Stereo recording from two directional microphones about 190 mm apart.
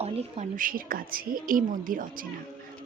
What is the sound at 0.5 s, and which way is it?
Speech, 45° right (ahead or behind).